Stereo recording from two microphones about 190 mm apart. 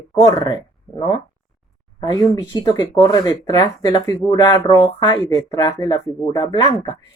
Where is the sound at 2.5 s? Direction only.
20° left (ahead or behind).